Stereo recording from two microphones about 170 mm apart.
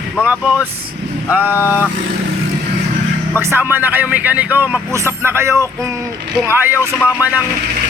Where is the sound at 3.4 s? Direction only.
15° right (ahead or behind).